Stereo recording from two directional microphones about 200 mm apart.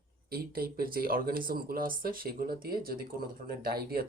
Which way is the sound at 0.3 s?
50° right (ahead or behind).